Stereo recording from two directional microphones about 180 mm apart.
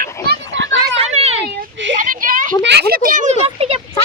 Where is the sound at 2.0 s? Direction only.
50° right (ahead or behind).